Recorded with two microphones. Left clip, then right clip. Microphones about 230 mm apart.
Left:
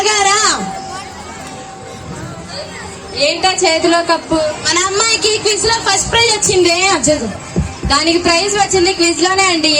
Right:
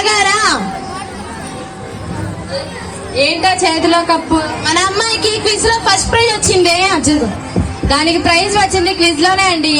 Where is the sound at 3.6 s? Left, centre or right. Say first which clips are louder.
Even; left.